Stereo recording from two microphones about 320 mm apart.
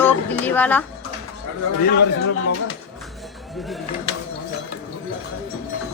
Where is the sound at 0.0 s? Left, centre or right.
Centre.